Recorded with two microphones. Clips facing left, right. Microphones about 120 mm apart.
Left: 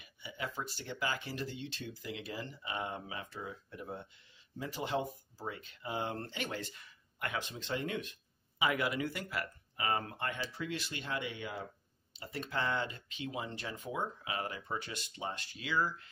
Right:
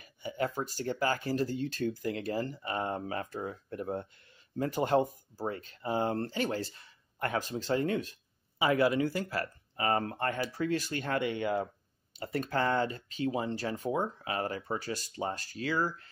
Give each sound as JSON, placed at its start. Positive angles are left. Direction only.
{"t": 0.0, "sound": "speech", "side_deg": -45}